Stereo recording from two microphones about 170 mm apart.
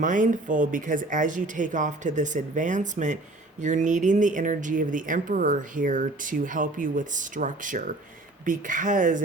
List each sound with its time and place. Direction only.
0.0 s speech: 50° right (ahead or behind)